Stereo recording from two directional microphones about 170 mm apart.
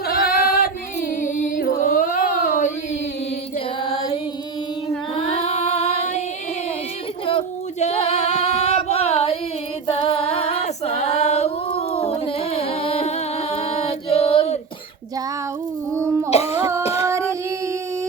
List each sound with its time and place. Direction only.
0.1 s singing: 60° left (ahead or behind)
1.2 s music: 50° left (ahead or behind)
5.1 s singing: 40° left (ahead or behind)
7.3 s singing: 35° left (ahead or behind)
9.8 s a sound: 35° left (ahead or behind)
12.5 s singing: 35° left (ahead or behind)
16.3 s a sound: 40° left (ahead or behind)
16.6 s a sound: 15° right (ahead or behind)
16.8 s child singing: 40° left (ahead or behind)
17.1 s child singing: 15° right (ahead or behind)